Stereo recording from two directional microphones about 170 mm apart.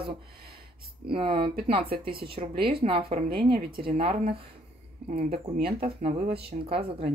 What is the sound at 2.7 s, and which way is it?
Speech, 30° right (ahead or behind).